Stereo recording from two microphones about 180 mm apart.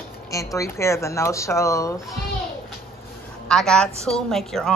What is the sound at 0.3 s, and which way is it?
A woman's voice, 20° left (ahead or behind).